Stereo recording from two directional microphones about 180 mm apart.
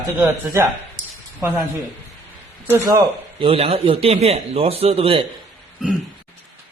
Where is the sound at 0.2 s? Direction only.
15° right (ahead or behind).